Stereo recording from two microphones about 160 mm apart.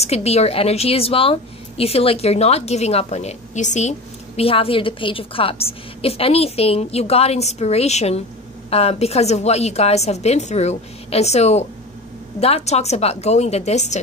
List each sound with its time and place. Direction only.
0.0 s a woman's voice: 40° left (ahead or behind)
4.4 s a woman's voice: 35° left (ahead or behind)